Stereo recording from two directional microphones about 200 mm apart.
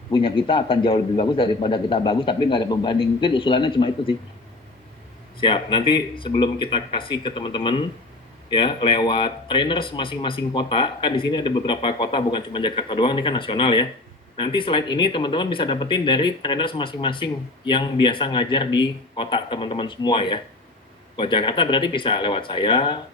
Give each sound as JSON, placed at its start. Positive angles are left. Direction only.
{"t": 0.1, "sound": "speech", "side_deg": 25}
{"t": 5.4, "sound": "speech", "side_deg": 25}